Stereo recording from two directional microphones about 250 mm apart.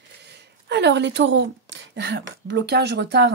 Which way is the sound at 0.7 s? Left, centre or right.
Right.